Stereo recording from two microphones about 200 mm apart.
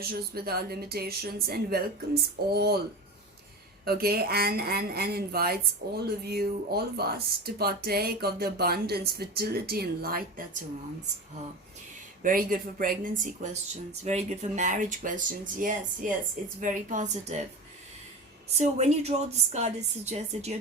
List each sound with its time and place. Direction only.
0.0 s speech: 50° right (ahead or behind)
3.8 s speech: 50° right (ahead or behind)
12.2 s speech: 45° right (ahead or behind)
18.5 s speech: 35° right (ahead or behind)